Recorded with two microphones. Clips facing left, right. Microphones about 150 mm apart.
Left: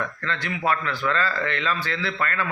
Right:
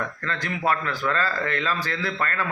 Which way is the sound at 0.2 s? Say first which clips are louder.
Even; 40° right (ahead or behind).